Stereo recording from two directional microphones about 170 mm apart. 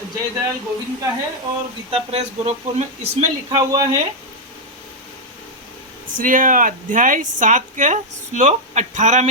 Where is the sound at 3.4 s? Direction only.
25° right (ahead or behind).